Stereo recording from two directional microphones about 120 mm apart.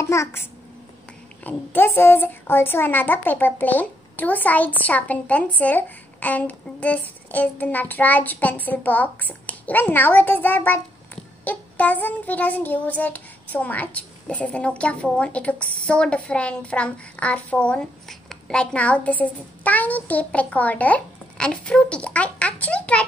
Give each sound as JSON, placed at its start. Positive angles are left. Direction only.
{"t": 0.0, "sound": "a child's voice", "side_deg": 25}
{"t": 1.4, "sound": "child singing", "side_deg": 15}